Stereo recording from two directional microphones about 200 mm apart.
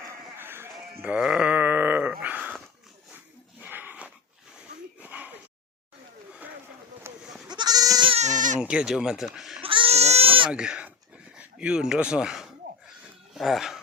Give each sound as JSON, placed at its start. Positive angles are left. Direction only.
{"t": 0.3, "sound": "a sound", "side_deg": -10}
{"t": 3.6, "sound": "a sound", "side_deg": -10}
{"t": 7.1, "sound": "goat", "side_deg": -10}
{"t": 8.6, "sound": "speech", "side_deg": -5}
{"t": 9.6, "sound": "baby cry", "side_deg": -25}
{"t": 10.5, "sound": "speech", "side_deg": -5}